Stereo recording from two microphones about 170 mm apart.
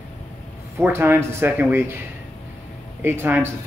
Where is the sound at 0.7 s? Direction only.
15° right (ahead or behind).